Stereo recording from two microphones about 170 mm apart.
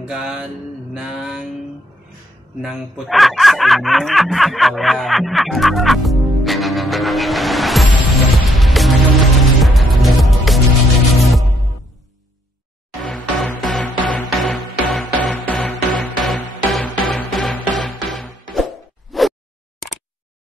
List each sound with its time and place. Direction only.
0.0 s mantra: 5° right (ahead or behind)
0.9 s a sound: 5° right (ahead or behind)
2.6 s speech: centre (ahead or behind)
8.5 s music: centre (ahead or behind)
13.0 s music: centre (ahead or behind)